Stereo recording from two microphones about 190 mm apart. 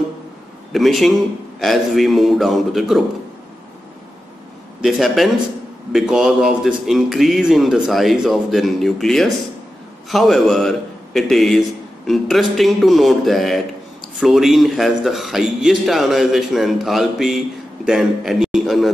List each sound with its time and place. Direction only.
0.7 s a man's voice: centre (ahead or behind)
4.8 s a man's voice: centre (ahead or behind)